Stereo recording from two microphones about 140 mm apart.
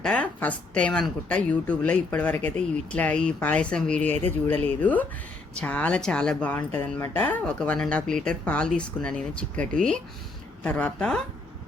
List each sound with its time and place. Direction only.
0.0 s speech: 10° left (ahead or behind)